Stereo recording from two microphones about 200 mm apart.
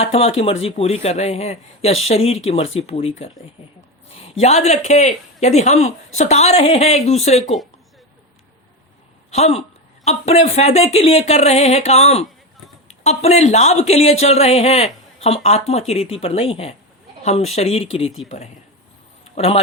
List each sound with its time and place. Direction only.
0.0 s a woman's voice: 30° left (ahead or behind)
9.3 s a woman's voice: 30° left (ahead or behind)
19.4 s speech: 30° left (ahead or behind)